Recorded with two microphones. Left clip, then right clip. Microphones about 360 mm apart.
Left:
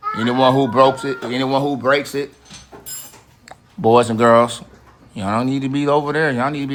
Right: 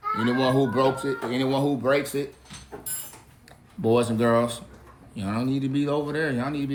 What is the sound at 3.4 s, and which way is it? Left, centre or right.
Speech, centre.